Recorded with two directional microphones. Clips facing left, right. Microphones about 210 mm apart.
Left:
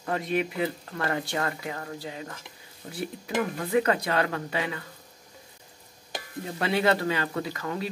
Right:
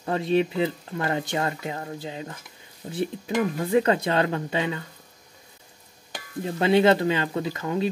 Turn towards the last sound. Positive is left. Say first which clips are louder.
# right 5 dB
turn(degrees=-20)  # may be behind; listen again after turning